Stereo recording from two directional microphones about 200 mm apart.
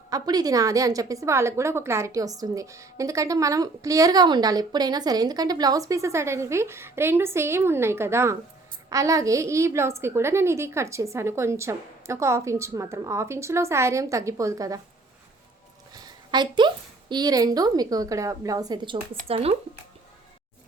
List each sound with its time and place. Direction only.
0.1 s a woman's voice: 20° right (ahead or behind)
16.0 s a woman's voice: 20° right (ahead or behind)